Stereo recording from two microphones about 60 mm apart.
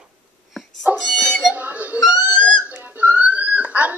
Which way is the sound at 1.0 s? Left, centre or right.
Centre.